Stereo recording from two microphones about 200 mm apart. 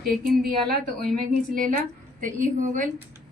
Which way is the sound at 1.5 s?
45° right (ahead or behind).